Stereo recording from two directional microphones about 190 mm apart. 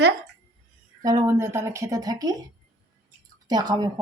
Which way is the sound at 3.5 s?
20° right (ahead or behind).